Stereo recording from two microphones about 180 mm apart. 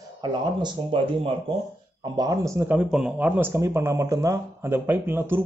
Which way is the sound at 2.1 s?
20° right (ahead or behind).